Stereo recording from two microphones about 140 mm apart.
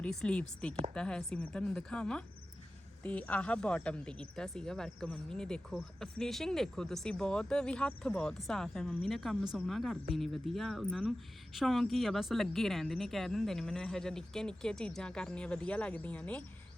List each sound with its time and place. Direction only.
0.0 s a woman's voice: 5° left (ahead or behind)